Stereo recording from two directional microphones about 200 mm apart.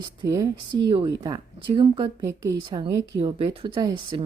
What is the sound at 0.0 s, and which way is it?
Speech, 20° right (ahead or behind).